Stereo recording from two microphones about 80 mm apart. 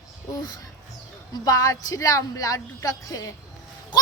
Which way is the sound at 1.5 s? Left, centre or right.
Left.